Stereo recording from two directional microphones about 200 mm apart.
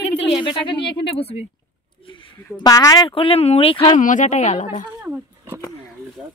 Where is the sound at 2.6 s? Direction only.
20° left (ahead or behind); by 4.8 s 35° left (ahead or behind).